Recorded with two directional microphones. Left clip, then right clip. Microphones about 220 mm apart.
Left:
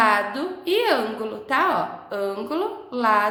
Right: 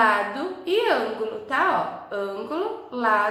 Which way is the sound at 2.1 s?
35° left (ahead or behind).